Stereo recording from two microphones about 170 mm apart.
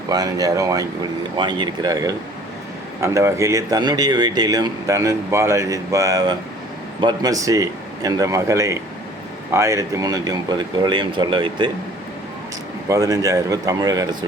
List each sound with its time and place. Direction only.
0.1 s speech: 20° right (ahead or behind)
12.9 s speech: 20° right (ahead or behind)